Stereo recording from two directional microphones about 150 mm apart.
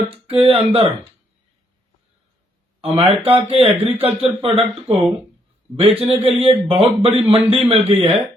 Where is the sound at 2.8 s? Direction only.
40° right (ahead or behind).